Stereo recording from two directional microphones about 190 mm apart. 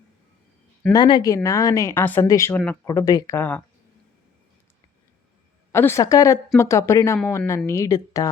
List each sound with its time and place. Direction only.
0.9 s a woman's voice: 25° left (ahead or behind)
5.7 s a woman's voice: 15° left (ahead or behind)